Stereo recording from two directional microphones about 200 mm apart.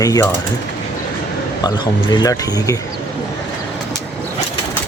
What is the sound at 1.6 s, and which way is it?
Speech, 20° left (ahead or behind).